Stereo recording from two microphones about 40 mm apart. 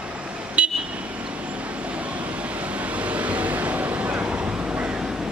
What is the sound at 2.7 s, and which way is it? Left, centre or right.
Vehicle, right.